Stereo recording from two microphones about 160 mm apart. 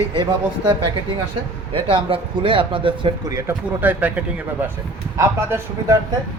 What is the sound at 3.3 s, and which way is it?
Speech, 20° right (ahead or behind).